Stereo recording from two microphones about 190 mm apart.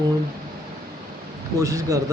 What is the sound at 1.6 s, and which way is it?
Speech, 15° right (ahead or behind).